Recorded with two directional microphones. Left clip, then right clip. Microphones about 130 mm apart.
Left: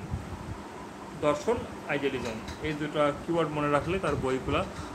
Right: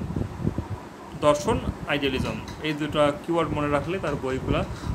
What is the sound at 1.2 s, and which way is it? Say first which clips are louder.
Speech: right 6 dB; 90° right.